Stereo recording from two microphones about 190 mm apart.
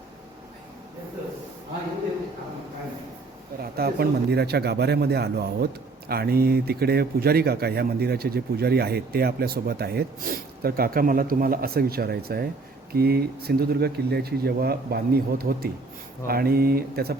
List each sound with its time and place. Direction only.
3.6 s speech: 55° right (ahead or behind)